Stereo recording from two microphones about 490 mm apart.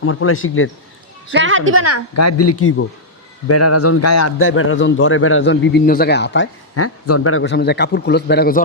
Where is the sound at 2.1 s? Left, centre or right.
Left.